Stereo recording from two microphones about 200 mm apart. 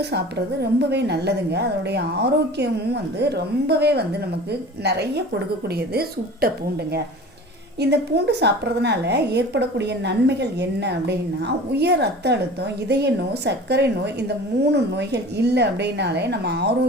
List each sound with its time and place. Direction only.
0.0 s a woman's voice: 55° right (ahead or behind)
7.8 s a woman's voice: 55° right (ahead or behind)